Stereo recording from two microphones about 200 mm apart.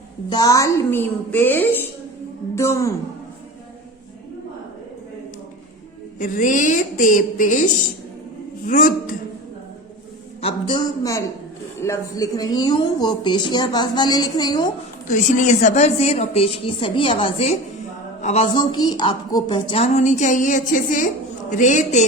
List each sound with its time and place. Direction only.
0.3 s a woman's voice: 20° left (ahead or behind)
6.1 s a woman's voice: 40° left (ahead or behind)
10.4 s a woman's voice: 25° left (ahead or behind)
15.0 s a woman's voice: 40° left (ahead or behind)
18.5 s a woman's voice: 20° left (ahead or behind); by 22.0 s 40° left (ahead or behind)